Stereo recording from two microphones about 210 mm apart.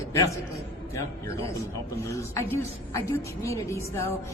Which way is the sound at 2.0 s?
15° left (ahead or behind).